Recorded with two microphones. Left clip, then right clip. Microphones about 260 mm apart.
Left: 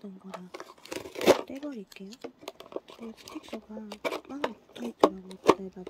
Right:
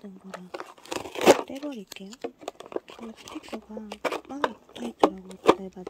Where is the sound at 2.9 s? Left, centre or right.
Centre.